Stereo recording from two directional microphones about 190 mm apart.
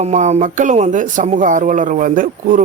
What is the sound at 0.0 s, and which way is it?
Speech, 35° right (ahead or behind).